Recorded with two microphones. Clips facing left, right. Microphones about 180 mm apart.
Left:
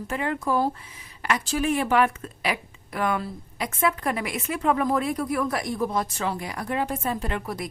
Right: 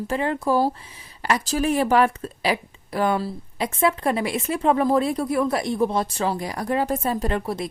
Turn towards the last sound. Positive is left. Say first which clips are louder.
# right 5 dB
turn(degrees=-25)  # may be behind; listen again after turning